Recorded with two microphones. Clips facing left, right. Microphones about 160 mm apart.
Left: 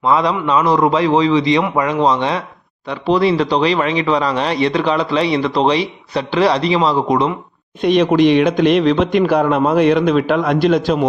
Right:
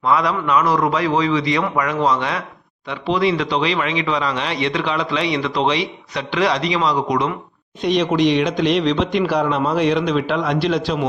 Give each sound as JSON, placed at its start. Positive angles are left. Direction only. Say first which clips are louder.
{"t": 0.0, "sound": "a man's voice", "louder": "left 3 dB", "side_deg": 25}
{"t": 2.8, "sound": "speech", "louder": "left 4 dB", "side_deg": 35}
{"t": 7.8, "sound": "speech", "louder": "left 5 dB", "side_deg": 55}